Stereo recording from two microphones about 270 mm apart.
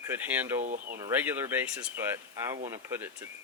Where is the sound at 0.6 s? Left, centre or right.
Right.